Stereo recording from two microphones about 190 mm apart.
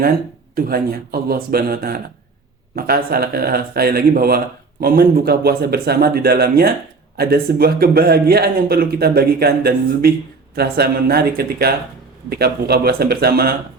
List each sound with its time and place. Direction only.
0.5 s speech: 55° right (ahead or behind)